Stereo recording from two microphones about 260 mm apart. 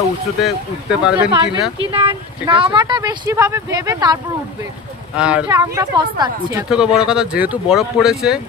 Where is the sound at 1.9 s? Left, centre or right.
Centre.